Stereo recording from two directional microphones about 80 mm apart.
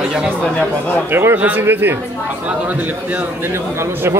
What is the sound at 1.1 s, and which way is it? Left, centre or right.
Speech, right.